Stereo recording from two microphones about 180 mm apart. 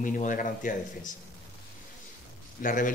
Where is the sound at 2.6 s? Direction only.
50° left (ahead or behind).